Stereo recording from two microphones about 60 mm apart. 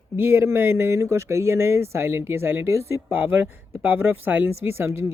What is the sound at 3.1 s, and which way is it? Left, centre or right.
Speech, right.